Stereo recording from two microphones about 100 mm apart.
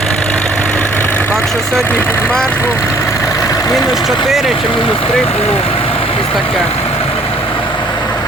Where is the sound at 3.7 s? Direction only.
Centre (ahead or behind).